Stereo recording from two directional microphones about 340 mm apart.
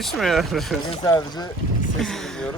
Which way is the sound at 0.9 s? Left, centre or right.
Centre.